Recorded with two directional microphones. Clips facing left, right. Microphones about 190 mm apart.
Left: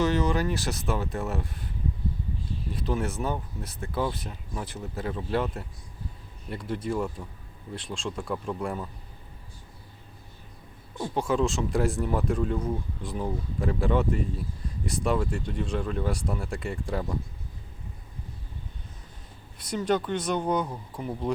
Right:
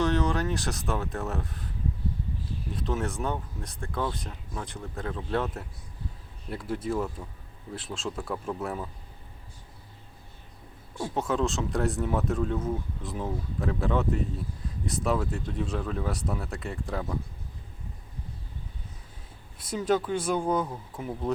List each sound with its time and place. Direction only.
0.0 s speech: centre (ahead or behind)
2.7 s speech: centre (ahead or behind)
11.0 s speech: centre (ahead or behind)
19.7 s speech: 5° right (ahead or behind)